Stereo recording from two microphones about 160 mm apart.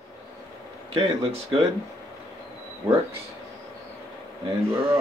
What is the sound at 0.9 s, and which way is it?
Speech, 35° right (ahead or behind).